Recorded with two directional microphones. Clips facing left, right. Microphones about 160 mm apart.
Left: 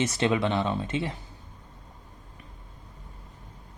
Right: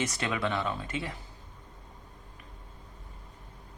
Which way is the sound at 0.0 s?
25° left (ahead or behind).